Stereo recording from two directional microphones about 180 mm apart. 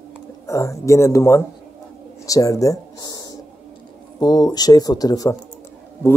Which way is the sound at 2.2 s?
20° left (ahead or behind).